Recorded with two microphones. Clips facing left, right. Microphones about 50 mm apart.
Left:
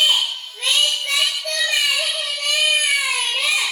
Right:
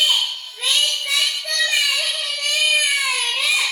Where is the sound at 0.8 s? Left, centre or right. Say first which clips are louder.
Left 1 dB; centre.